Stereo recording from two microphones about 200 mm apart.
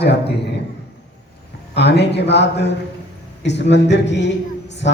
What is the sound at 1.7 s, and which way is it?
A man's voice, 60° left (ahead or behind).